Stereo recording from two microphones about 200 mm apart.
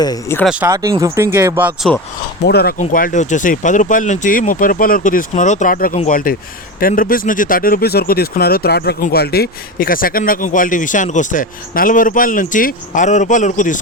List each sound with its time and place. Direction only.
0.0 s speech: 20° left (ahead or behind)
0.3 s speech: 5° right (ahead or behind)
0.7 s speech: 15° right (ahead or behind)
2.5 s speech: 50° left (ahead or behind)